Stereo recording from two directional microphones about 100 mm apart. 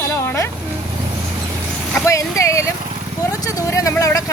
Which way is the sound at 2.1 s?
30° left (ahead or behind).